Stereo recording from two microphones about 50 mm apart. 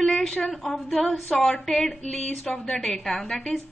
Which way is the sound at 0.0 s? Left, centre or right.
Centre.